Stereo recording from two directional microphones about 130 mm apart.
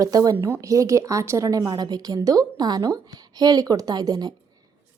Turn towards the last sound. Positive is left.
turn(degrees=-30)  # may be behind; listen again after turning